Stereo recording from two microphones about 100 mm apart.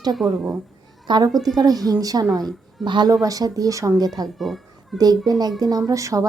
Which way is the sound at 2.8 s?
50° right (ahead or behind).